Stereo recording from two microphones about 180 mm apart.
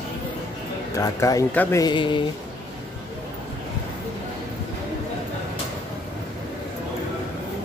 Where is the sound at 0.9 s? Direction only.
20° left (ahead or behind).